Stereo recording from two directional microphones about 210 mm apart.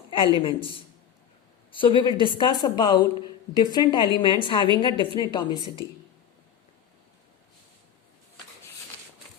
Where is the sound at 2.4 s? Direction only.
20° left (ahead or behind).